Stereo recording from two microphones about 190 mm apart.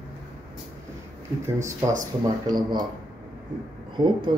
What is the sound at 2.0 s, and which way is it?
Speech, 20° right (ahead or behind).